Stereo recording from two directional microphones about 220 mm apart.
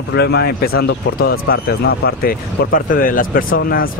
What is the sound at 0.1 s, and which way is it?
Speech, 50° left (ahead or behind).